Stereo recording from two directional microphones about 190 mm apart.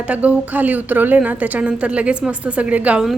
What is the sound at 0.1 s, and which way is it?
A woman's voice, 10° right (ahead or behind).